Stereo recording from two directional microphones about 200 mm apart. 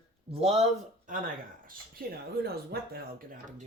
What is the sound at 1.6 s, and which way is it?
Speech, 45° right (ahead or behind).